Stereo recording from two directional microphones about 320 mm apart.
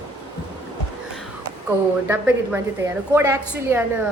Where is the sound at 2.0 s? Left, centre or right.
Centre.